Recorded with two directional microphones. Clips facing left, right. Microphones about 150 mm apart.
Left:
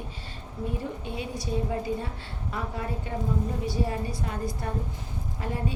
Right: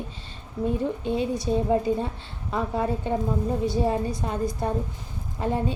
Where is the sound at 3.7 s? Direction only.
20° right (ahead or behind).